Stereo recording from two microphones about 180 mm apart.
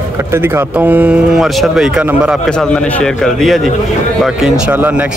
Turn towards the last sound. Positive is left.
turn(degrees=-10)  # may be behind; listen again after turning